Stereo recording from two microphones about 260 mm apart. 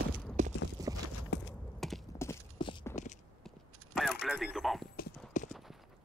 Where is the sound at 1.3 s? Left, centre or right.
Left.